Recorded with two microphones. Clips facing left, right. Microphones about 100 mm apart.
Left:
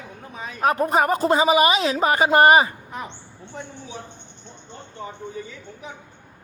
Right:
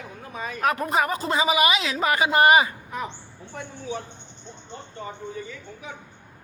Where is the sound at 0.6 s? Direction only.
35° left (ahead or behind).